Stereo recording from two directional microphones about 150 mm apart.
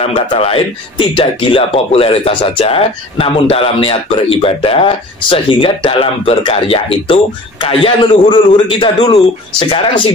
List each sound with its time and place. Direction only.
0.0 s speech: 40° left (ahead or behind)